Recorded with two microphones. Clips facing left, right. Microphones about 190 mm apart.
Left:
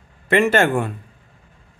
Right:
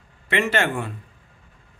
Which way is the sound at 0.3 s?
45° left (ahead or behind).